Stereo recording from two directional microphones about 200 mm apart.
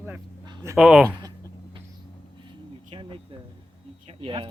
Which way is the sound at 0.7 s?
5° right (ahead or behind).